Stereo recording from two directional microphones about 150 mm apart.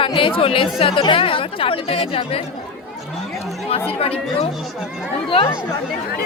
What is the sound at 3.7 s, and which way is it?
Speech, 40° left (ahead or behind).